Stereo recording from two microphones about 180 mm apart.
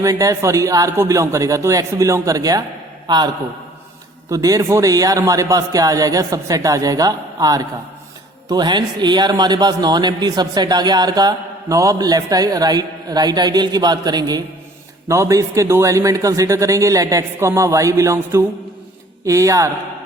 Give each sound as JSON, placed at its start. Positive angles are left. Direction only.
{"t": 0.0, "sound": "a man's voice", "side_deg": -20}